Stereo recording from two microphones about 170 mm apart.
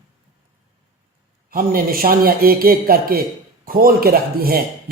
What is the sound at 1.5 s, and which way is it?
A man's voice, 60° right (ahead or behind).